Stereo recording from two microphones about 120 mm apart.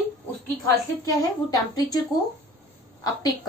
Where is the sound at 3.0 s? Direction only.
35° left (ahead or behind).